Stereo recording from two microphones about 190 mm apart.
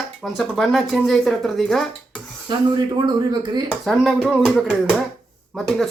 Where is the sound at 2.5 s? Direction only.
25° right (ahead or behind).